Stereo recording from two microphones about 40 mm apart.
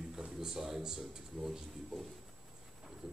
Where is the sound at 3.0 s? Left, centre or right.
Centre.